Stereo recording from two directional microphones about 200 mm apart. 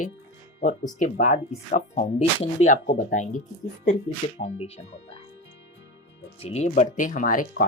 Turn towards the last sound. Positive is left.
turn(degrees=40)  # may be behind; listen again after turning